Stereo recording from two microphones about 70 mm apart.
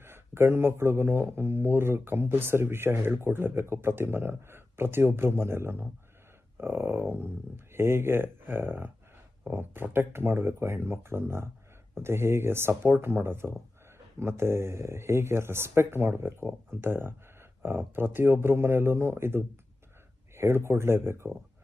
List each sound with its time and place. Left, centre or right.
0.0 s speech: right